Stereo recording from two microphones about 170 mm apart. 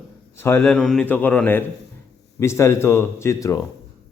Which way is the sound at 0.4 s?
10° left (ahead or behind).